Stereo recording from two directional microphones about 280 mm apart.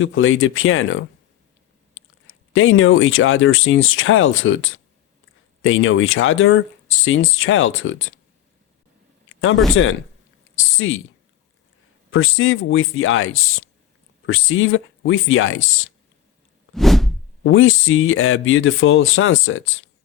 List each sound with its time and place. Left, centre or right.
0.0 s speech: left
9.3 s a sound: left
9.8 s speech: left
12.1 s speech: left
16.7 s whoosh: centre
17.4 s speech: left